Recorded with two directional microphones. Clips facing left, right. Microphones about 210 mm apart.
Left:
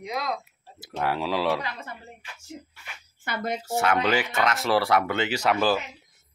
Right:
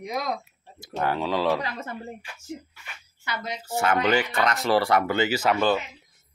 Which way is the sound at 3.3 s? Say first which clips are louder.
Left 3 dB; 50° left (ahead or behind).